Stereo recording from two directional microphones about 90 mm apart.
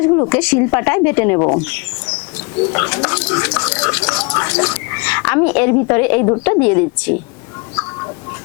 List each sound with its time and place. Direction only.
0.0 s speech: 25° left (ahead or behind)